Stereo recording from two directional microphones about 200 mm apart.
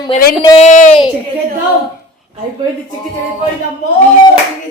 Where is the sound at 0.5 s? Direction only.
40° left (ahead or behind).